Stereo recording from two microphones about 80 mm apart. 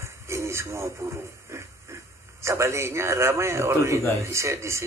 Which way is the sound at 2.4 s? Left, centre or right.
Right.